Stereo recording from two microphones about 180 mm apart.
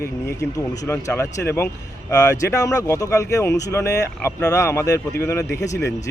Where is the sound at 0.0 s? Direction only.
15° left (ahead or behind).